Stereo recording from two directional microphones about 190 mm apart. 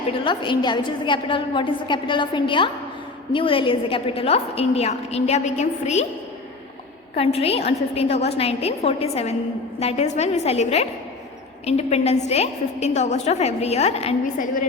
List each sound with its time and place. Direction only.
0.3 s a woman's voice: 25° left (ahead or behind)
7.2 s a woman's voice: 30° left (ahead or behind)